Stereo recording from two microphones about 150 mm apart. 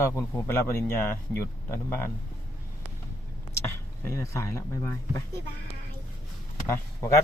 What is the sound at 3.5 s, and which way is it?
Speech, 20° left (ahead or behind).